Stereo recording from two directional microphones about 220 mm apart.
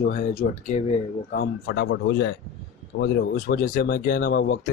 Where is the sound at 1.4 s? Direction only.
50° left (ahead or behind).